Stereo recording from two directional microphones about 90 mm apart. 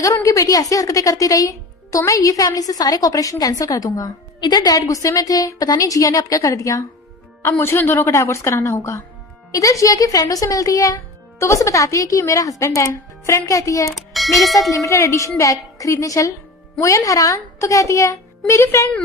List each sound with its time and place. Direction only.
0.2 s a woman's voice: 35° left (ahead or behind)
7.6 s a woman's voice: 25° left (ahead or behind)
13.9 s speech: centre (ahead or behind)
14.7 s a woman's voice: 35° left (ahead or behind)